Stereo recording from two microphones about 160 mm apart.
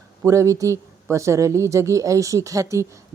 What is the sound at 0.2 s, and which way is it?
Speech, 20° right (ahead or behind).